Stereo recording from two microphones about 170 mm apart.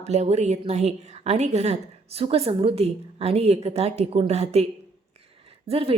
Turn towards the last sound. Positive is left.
turn(degrees=-35)  # may be behind; listen again after turning